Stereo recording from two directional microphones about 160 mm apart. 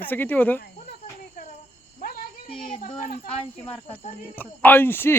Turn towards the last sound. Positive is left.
turn(degrees=15)  # may be behind; listen again after turning